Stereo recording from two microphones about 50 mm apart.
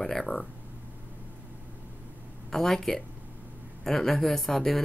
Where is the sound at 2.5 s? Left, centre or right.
Centre.